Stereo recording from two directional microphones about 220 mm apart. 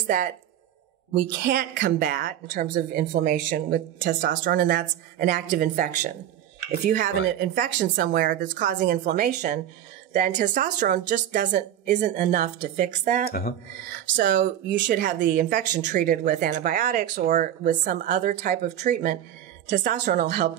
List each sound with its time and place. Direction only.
1.1 s speech: 45° right (ahead or behind)
13.3 s speech: 40° left (ahead or behind)
14.9 s speech: 35° right (ahead or behind)